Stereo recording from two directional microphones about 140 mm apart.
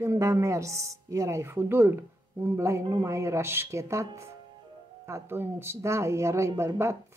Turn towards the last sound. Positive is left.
turn(degrees=-20)  # may be behind; listen again after turning